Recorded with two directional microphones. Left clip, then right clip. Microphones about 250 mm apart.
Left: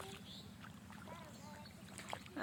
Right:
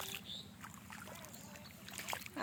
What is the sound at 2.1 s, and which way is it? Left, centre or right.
Splash, right.